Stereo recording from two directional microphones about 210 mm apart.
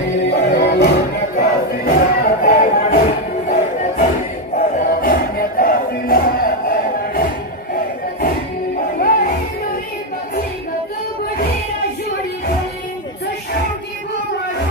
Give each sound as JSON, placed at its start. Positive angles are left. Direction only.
{"t": 0.3, "sound": "music", "side_deg": 50}
{"t": 4.6, "sound": "music", "side_deg": 40}
{"t": 8.7, "sound": "music", "side_deg": 40}